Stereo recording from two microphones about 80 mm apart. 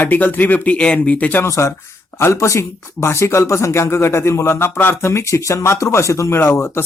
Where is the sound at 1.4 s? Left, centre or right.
Left.